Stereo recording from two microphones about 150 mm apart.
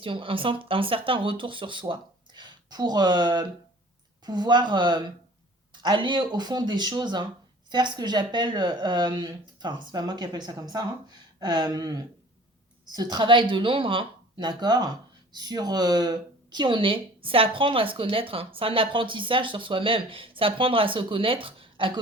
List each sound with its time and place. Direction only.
0.0 s a woman's voice: 35° right (ahead or behind)